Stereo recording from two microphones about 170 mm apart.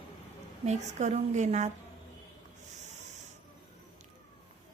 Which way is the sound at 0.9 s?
45° right (ahead or behind).